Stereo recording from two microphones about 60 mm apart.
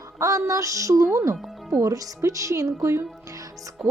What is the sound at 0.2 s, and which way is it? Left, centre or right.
A woman's voice, right.